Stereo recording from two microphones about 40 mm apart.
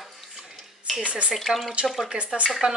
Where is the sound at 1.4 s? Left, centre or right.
Centre.